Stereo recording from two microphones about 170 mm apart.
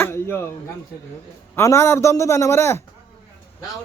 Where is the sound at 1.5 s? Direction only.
15° left (ahead or behind).